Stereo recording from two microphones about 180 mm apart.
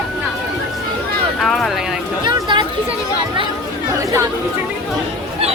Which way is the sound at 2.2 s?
25° right (ahead or behind).